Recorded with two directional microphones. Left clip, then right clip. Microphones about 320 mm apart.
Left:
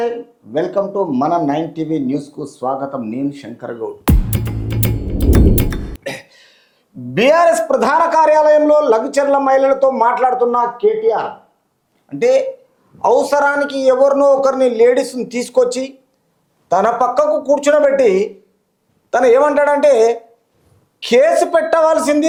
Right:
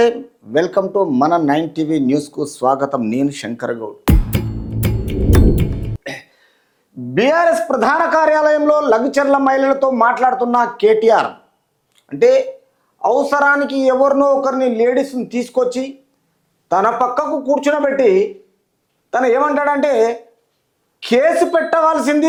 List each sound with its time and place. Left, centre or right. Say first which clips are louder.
0.5 s speech: right 2 dB; right
4.0 s music: right 3 dB; centre
6.0 s a sound: left 2 dB; right
7.1 s a man's voice: left 2 dB; right
12.0 s a man's voice: right 1 dB; right